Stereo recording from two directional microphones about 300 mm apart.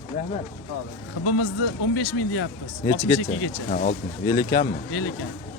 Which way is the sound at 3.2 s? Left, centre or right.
Left.